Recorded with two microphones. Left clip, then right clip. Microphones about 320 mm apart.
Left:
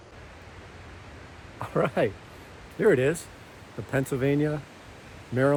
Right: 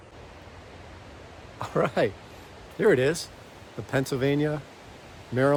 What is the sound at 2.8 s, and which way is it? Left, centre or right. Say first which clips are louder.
Speech: even; centre.